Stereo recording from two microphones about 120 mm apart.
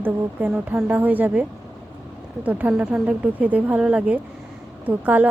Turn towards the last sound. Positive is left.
turn(degrees=-15)  # may be behind; listen again after turning